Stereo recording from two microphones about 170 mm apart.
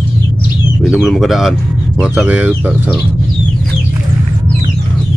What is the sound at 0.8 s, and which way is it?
Speech, centre (ahead or behind).